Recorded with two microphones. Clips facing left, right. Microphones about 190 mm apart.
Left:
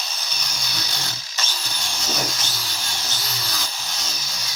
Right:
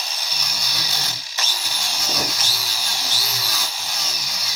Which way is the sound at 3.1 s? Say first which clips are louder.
Right 1 dB; 5° right (ahead or behind).